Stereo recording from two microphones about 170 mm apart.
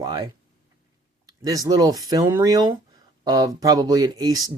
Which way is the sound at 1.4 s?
20° right (ahead or behind).